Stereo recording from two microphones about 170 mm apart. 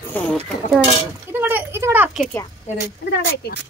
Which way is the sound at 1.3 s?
10° right (ahead or behind).